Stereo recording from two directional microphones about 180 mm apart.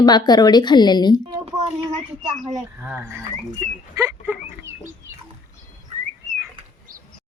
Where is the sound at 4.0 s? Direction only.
10° right (ahead or behind).